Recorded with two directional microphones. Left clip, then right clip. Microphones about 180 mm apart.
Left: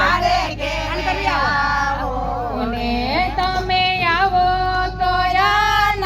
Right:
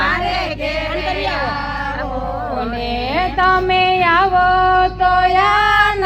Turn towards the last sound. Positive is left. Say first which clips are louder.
# right 3 dB
turn(degrees=-15)  # may be behind; listen again after turning